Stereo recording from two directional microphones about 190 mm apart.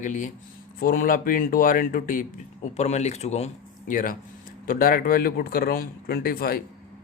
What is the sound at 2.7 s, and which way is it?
A man's voice, 35° left (ahead or behind).